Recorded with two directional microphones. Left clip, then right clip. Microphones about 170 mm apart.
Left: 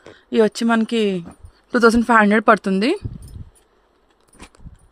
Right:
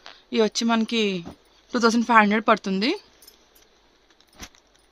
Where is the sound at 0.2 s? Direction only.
35° left (ahead or behind).